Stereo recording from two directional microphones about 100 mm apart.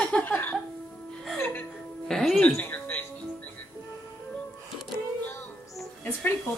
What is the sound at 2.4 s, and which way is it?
Music, 15° left (ahead or behind).